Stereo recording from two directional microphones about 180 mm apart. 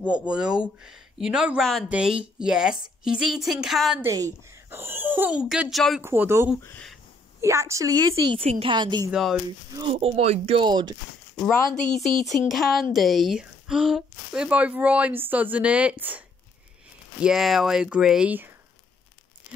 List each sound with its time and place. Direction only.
0.1 s speech: 5° right (ahead or behind)
4.0 s speech: 15° right (ahead or behind); by 6.0 s centre (ahead or behind)
6.0 s speech: 15° right (ahead or behind)
6.6 s speech: 10° left (ahead or behind)
7.4 s a woman's voice: 15° right (ahead or behind)
9.1 s speech: 5° right (ahead or behind)
9.8 s speech: 30° right (ahead or behind)
11.3 s speech: 5° left (ahead or behind)
11.6 s speech: 45° left (ahead or behind)
12.3 s speech: centre (ahead or behind)